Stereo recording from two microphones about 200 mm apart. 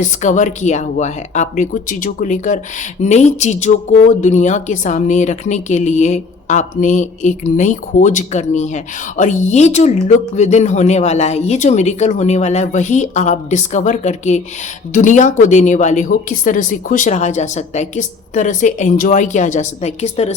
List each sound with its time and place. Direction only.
0.0 s speech: 40° left (ahead or behind)